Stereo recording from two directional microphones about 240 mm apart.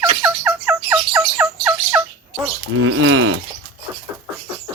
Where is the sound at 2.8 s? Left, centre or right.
Right.